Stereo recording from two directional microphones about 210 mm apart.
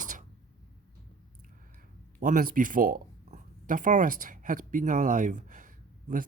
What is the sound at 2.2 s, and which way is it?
Speech, 40° right (ahead or behind).